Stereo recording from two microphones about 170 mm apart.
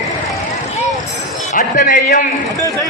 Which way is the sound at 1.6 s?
55° left (ahead or behind).